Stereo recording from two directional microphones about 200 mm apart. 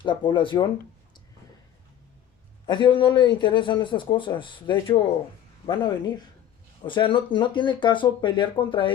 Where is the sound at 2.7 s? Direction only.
25° left (ahead or behind).